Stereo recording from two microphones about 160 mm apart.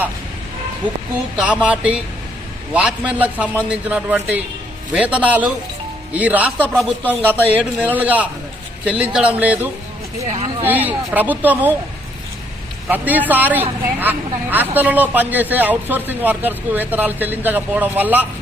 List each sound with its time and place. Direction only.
1.4 s a man's voice: 10° right (ahead or behind)
10.2 s speech: 40° right (ahead or behind)
10.7 s a man's voice: 10° right (ahead or behind)
12.9 s a man's voice: 10° right (ahead or behind)